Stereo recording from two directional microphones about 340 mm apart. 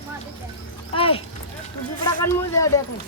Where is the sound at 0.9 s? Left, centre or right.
Centre.